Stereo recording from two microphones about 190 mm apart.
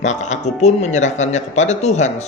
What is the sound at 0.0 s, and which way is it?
Speech, 40° left (ahead or behind).